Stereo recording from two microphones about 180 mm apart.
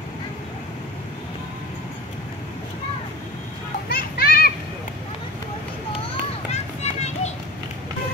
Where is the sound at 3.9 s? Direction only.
55° left (ahead or behind).